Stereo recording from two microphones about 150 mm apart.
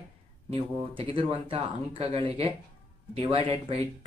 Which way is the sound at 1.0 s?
40° right (ahead or behind).